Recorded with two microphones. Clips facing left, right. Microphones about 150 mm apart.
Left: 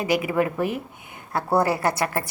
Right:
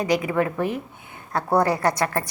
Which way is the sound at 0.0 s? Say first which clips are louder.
Even; 10° left (ahead or behind).